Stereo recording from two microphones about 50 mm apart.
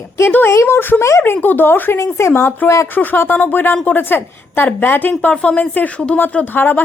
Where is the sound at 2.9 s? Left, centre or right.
Left.